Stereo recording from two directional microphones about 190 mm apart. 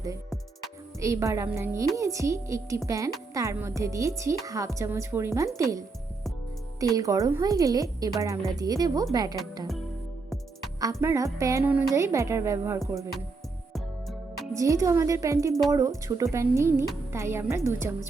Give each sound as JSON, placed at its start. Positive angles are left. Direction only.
{"t": 0.9, "sound": "a woman's voice", "side_deg": -15}
{"t": 6.7, "sound": "a woman's voice", "side_deg": -20}
{"t": 10.8, "sound": "a woman's voice", "side_deg": -15}
{"t": 13.7, "sound": "music", "side_deg": 0}
{"t": 14.5, "sound": "a woman's voice", "side_deg": -15}